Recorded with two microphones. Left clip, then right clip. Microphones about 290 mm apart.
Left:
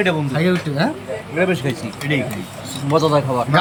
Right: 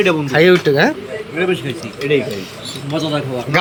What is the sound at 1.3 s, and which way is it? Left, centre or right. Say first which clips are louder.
Speech: right 1 dB; centre.